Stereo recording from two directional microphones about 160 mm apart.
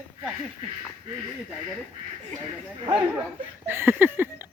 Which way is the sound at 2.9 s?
5° right (ahead or behind).